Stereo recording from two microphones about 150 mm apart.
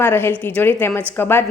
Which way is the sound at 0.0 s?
15° left (ahead or behind).